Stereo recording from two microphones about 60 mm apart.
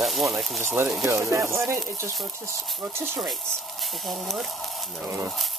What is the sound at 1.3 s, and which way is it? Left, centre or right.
Speech, right.